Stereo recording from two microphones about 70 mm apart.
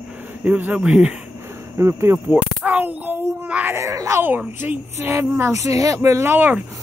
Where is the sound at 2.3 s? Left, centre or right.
Right.